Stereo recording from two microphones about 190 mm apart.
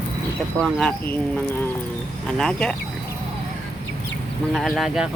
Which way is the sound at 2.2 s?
5° left (ahead or behind).